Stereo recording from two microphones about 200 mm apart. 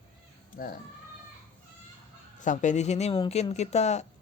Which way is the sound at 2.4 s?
40° left (ahead or behind).